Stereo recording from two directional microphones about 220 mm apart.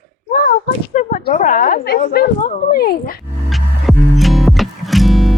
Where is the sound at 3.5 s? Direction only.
Centre (ahead or behind).